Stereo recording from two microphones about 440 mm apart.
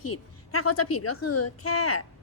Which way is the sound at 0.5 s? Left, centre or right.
Left.